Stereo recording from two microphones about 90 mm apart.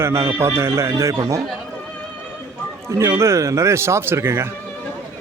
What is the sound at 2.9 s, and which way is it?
A man's voice, 30° right (ahead or behind).